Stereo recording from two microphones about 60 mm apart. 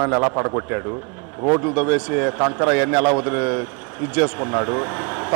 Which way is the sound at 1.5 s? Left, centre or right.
Right.